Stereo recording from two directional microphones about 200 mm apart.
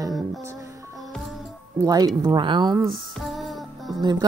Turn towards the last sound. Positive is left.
turn(degrees=0)  # may be behind; listen again after turning